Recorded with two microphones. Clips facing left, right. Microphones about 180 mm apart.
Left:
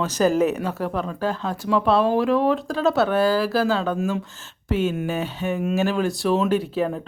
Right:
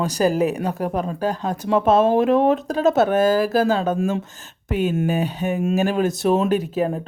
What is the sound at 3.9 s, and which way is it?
Speech, 30° right (ahead or behind).